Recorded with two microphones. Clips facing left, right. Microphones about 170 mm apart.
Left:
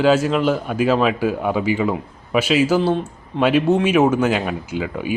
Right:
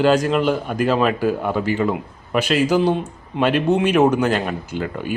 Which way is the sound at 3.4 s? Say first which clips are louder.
Left 1 dB; 5° left (ahead or behind).